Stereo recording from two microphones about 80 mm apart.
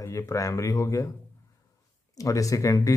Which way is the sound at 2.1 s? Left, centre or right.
Left.